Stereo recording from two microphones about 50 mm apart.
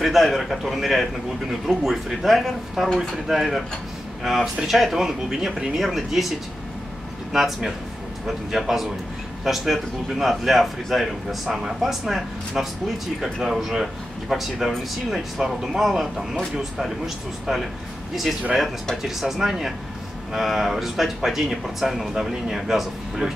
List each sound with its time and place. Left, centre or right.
0.0 s a man's voice: centre
7.3 s a man's voice: centre
19.0 s a man's voice: centre